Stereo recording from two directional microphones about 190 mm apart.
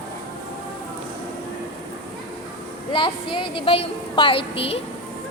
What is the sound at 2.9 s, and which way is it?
A woman's voice, 25° left (ahead or behind).